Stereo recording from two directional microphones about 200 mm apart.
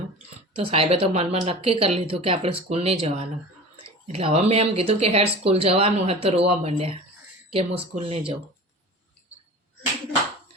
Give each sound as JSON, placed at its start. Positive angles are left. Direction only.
{"t": 0.5, "sound": "speech", "side_deg": -30}